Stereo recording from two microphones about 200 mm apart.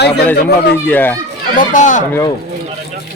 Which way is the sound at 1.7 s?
40° left (ahead or behind).